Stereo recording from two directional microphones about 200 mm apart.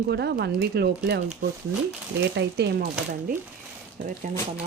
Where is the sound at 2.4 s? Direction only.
55° right (ahead or behind).